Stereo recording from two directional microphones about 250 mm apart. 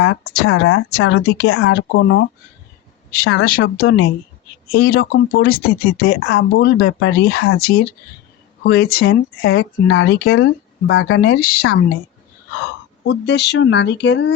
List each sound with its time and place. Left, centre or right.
0.3 s speech: left
3.2 s speech: left
6.7 s speech: left
7.1 s speech: left
10.3 s speech: left
13.1 s speech: left